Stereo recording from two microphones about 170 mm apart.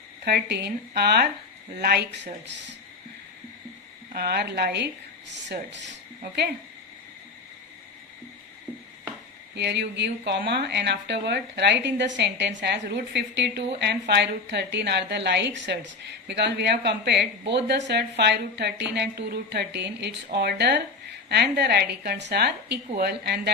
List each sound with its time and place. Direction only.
0.3 s a woman's voice: 75° right (ahead or behind)
4.1 s a woman's voice: 70° right (ahead or behind)
9.6 s a woman's voice: 90° right; by 23.5 s 70° right (ahead or behind)